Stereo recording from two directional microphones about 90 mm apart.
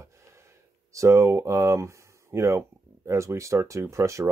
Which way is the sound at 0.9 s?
35° right (ahead or behind).